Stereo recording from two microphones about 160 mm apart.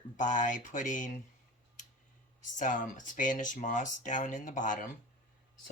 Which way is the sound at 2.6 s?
55° left (ahead or behind).